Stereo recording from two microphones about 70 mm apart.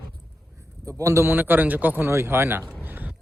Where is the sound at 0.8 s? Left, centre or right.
Right.